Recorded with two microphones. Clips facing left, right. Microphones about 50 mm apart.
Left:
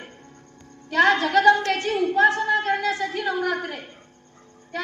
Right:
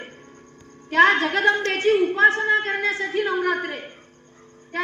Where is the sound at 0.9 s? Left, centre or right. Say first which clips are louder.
Right 1 dB; right.